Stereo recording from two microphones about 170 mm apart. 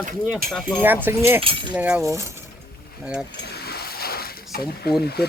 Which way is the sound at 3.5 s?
70° left (ahead or behind).